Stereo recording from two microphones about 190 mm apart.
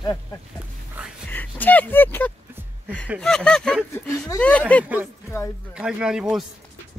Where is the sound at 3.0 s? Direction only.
Centre (ahead or behind).